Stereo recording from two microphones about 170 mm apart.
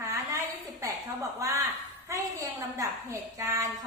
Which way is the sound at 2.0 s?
15° right (ahead or behind).